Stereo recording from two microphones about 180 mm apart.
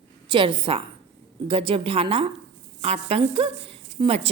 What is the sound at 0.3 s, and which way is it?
A woman's voice, 30° right (ahead or behind).